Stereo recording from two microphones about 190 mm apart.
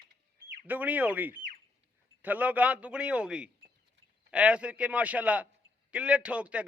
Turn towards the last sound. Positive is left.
turn(degrees=-5)  # may be behind; listen again after turning